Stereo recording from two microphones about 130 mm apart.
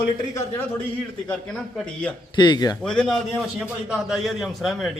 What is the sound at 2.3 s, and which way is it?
Speech, 35° left (ahead or behind).